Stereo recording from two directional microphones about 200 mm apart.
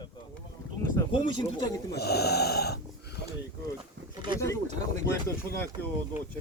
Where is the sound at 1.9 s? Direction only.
55° left (ahead or behind).